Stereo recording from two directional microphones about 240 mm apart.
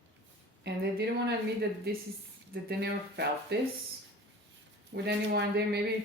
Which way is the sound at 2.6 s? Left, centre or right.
Right.